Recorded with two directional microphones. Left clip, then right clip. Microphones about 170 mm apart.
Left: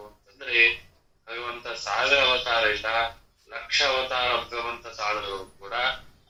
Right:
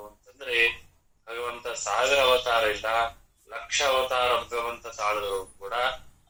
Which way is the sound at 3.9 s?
40° right (ahead or behind).